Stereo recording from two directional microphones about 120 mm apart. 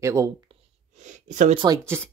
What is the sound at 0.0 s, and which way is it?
Speech, 25° right (ahead or behind).